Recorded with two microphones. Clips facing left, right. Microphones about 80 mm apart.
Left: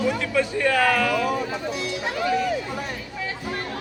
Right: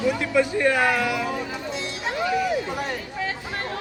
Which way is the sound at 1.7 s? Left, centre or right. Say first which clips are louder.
Left 1 dB; right.